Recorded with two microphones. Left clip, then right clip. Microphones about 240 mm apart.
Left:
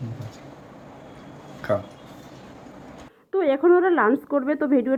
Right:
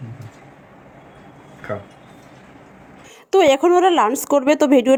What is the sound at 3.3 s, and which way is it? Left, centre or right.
Speech, centre.